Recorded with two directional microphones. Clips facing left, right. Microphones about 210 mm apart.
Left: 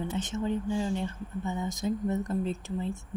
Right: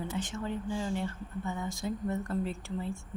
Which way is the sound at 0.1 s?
20° left (ahead or behind).